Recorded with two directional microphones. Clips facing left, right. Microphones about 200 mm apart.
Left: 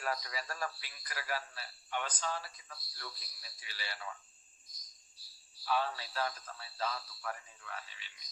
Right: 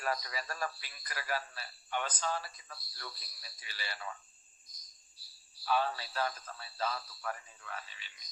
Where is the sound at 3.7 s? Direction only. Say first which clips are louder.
Right 1 dB; 45° right (ahead or behind).